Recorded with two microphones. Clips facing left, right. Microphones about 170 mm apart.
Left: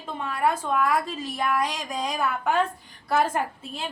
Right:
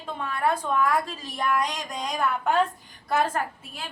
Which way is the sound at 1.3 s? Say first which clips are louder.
Even; 5° left (ahead or behind).